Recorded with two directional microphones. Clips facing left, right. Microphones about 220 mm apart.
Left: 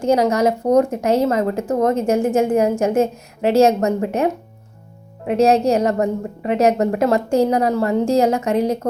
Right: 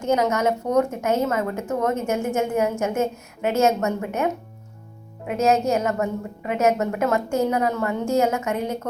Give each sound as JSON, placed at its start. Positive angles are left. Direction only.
{"t": 0.0, "sound": "speech", "side_deg": 35}